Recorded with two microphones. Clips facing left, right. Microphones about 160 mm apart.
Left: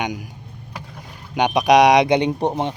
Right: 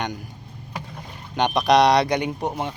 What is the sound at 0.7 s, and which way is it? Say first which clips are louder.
Boat: right 2 dB; centre (ahead or behind).